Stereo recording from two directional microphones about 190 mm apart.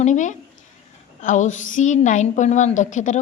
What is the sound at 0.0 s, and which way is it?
A woman's voice, 40° left (ahead or behind).